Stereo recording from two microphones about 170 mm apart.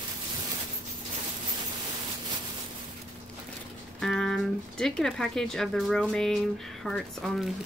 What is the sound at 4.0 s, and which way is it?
Speech, 5° left (ahead or behind).